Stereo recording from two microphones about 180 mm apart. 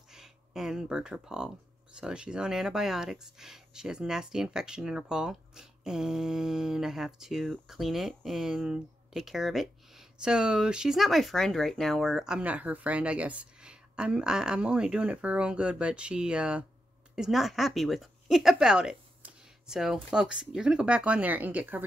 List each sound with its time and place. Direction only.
0.1 s speech: 5° right (ahead or behind)